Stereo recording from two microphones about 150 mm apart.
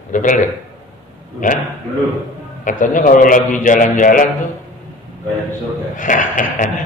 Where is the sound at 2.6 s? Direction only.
60° left (ahead or behind).